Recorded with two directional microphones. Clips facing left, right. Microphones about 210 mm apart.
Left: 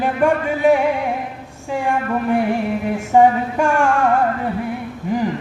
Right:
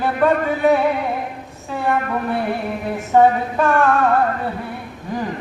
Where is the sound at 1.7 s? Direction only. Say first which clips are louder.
Left 1 dB; 15° left (ahead or behind).